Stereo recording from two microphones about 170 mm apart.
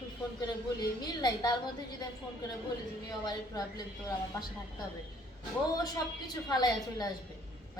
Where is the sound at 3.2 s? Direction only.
20° left (ahead or behind).